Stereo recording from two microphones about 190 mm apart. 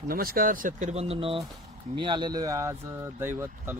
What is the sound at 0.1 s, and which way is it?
Speech, 50° right (ahead or behind).